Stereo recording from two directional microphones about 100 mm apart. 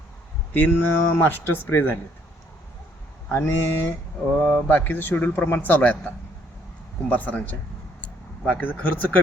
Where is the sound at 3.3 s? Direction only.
25° left (ahead or behind).